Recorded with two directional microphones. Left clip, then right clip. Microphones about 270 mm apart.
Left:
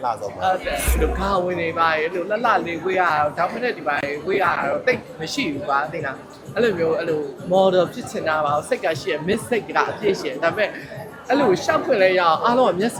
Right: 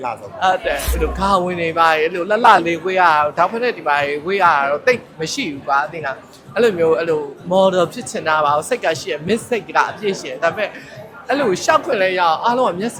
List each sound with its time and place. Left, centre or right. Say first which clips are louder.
0.4 s speech: right 5 dB; right
1.2 s a man's voice: right 7 dB; right
5.4 s speech: right 3 dB; right
11.3 s speech: right 3 dB; right
11.9 s speech: right 1 dB; right